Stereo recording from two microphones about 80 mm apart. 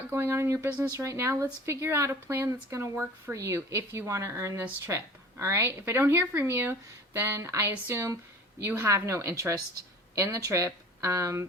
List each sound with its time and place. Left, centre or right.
0.1 s speech: right
2.9 s speech: right
3.3 s speech: right